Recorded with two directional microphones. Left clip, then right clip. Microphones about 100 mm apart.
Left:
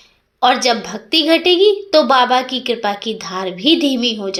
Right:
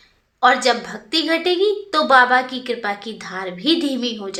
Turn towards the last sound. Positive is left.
turn(degrees=35)  # may be behind; listen again after turning